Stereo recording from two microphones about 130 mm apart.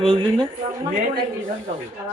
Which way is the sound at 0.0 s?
40° right (ahead or behind).